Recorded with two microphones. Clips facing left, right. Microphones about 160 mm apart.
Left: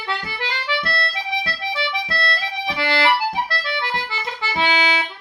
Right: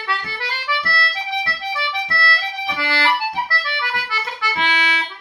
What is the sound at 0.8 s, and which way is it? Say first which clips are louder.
Accordion: even; 20° left (ahead or behind).